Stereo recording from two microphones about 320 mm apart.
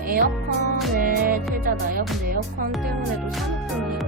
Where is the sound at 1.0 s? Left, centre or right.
Right.